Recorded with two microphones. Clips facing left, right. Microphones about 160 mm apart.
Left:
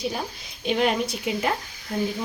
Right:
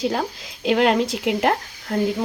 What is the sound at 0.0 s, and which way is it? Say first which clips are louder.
Speech: right 6 dB; 90° right.